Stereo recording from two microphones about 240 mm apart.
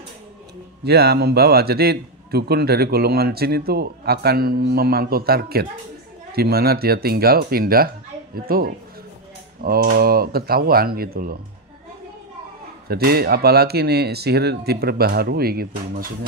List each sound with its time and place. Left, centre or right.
0.8 s a man's voice: right
12.8 s a man's voice: right